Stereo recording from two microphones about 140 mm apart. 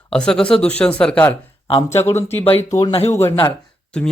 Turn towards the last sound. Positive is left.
turn(degrees=5)  # may be behind; listen again after turning